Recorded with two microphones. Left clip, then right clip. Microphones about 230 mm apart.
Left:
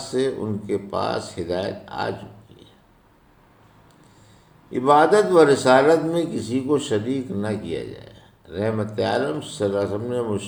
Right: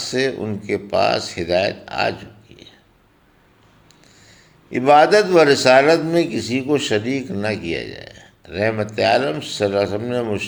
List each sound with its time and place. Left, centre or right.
0.0 s a sound: right
0.7 s a man's voice: right
4.7 s a man's voice: right